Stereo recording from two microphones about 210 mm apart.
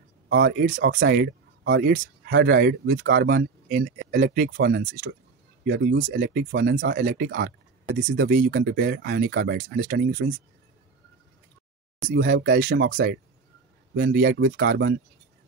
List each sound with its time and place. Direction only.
0.3 s speech: 50° right (ahead or behind)
12.1 s speech: 50° right (ahead or behind)